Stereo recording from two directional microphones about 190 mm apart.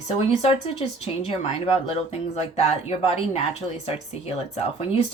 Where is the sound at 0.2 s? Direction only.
30° left (ahead or behind).